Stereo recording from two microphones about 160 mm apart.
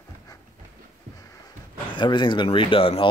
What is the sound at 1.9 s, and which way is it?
Speech, 30° left (ahead or behind).